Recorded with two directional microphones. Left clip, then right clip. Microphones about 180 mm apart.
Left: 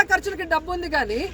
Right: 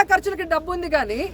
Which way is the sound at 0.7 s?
30° right (ahead or behind).